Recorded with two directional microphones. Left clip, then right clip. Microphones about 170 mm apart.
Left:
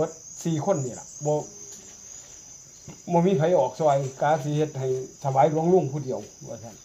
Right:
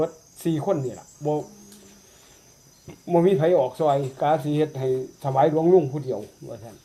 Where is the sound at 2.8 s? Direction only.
15° right (ahead or behind).